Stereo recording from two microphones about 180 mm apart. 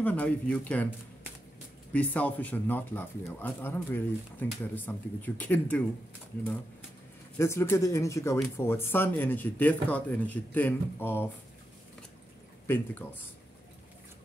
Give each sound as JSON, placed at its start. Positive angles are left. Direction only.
{"t": 0.0, "sound": "speech", "side_deg": 10}
{"t": 1.9, "sound": "speech", "side_deg": 10}
{"t": 7.3, "sound": "speech", "side_deg": 15}
{"t": 12.6, "sound": "speech", "side_deg": 10}